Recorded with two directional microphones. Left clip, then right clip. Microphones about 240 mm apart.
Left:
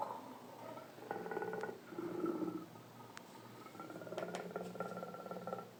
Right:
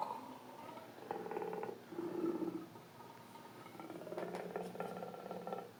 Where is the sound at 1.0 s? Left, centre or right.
Right.